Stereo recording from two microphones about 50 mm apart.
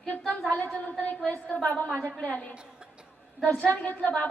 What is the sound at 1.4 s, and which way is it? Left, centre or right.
A woman's voice, left.